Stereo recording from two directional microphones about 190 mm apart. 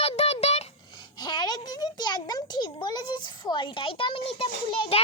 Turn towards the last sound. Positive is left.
turn(degrees=30)  # may be behind; listen again after turning